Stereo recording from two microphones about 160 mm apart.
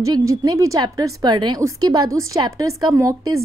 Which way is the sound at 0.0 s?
20° right (ahead or behind).